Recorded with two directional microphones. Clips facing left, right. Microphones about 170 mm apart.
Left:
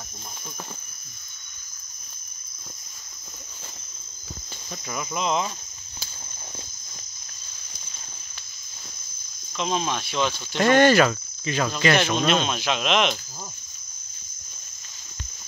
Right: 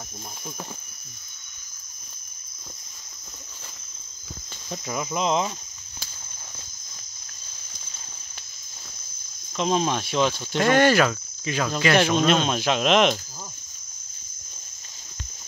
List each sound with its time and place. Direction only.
4.6 s cricket: 20° right (ahead or behind)
9.6 s cricket: 40° right (ahead or behind)
10.6 s cricket: 5° right (ahead or behind)
12.4 s speech: 45° right (ahead or behind)